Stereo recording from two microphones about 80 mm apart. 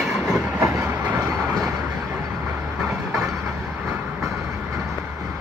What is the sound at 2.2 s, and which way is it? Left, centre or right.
Vehicle, right.